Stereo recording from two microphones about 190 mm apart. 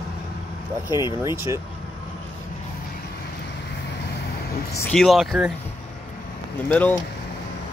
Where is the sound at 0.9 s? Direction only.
20° left (ahead or behind).